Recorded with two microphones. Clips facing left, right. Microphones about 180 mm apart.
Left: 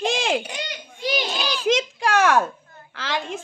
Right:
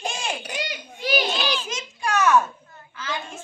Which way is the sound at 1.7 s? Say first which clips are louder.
Left 8 dB; 90° left.